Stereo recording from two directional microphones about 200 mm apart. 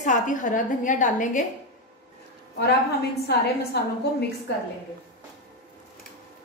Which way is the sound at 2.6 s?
55° left (ahead or behind).